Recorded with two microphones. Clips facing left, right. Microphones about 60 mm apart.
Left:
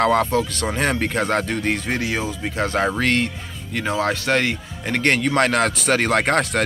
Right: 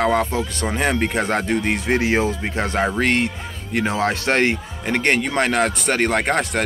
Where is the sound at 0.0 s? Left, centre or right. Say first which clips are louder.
Left 1 dB; centre.